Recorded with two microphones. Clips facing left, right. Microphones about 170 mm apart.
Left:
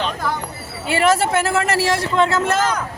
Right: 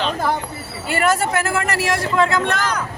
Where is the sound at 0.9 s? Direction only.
25° left (ahead or behind).